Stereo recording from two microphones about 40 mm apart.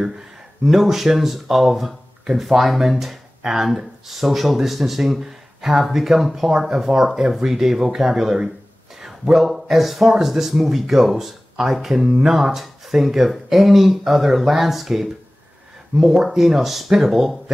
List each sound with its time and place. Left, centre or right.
0.7 s speech: centre
12.1 s speech: centre